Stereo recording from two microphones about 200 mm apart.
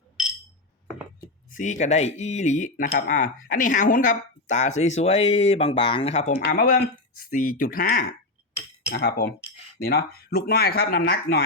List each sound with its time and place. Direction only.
1.5 s speech: 40° left (ahead or behind)
6.4 s speech: 50° left (ahead or behind)